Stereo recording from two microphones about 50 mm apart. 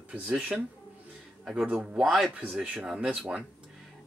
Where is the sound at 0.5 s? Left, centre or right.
Centre.